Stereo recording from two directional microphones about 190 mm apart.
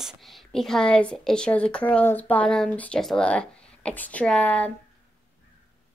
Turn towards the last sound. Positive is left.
turn(degrees=5)  # may be behind; listen again after turning